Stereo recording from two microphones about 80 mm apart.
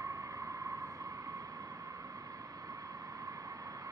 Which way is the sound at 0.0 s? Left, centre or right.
Right.